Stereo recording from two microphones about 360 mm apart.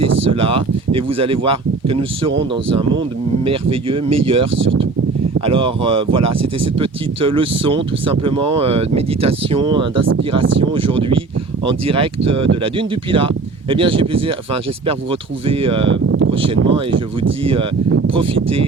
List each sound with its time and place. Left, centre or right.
0.3 s speech: centre
3.4 s speech: centre
4.5 s speech: right
5.5 s speech: centre
15.9 s a sound: right
16.4 s speech: right
17.4 s speech: centre